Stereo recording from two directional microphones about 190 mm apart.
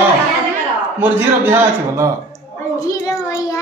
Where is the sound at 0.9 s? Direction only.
10° right (ahead or behind).